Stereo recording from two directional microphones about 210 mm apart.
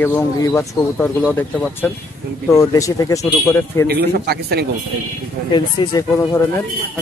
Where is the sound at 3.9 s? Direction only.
50° right (ahead or behind).